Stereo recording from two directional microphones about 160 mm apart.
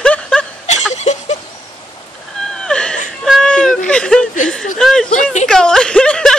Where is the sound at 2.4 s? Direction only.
5° left (ahead or behind).